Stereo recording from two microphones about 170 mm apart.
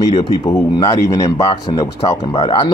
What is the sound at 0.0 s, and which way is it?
Speech, 30° left (ahead or behind).